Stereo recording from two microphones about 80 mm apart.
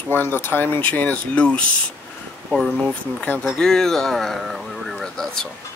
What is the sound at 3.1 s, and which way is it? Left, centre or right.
Speech, centre.